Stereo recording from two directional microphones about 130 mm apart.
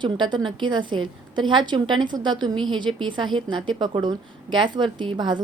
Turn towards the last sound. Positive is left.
turn(degrees=-35)  # may be behind; listen again after turning